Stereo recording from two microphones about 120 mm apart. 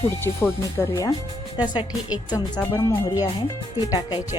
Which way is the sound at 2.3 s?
35° left (ahead or behind).